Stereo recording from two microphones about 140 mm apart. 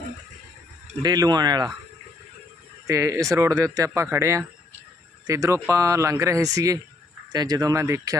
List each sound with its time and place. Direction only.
1.0 s speech: 30° right (ahead or behind)
2.8 s speech: 20° right (ahead or behind)